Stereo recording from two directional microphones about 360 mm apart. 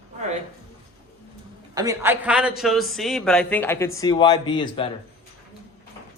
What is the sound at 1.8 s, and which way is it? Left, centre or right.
A man's voice, centre.